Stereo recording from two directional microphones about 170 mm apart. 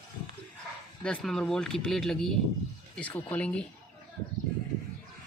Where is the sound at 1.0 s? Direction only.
5° left (ahead or behind).